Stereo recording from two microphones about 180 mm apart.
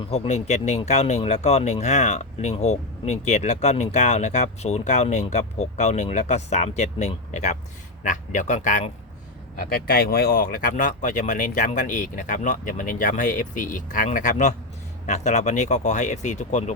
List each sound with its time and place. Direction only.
0.0 s speech: 30° left (ahead or behind)
9.6 s speech: 55° left (ahead or behind); by 16.7 s 40° left (ahead or behind)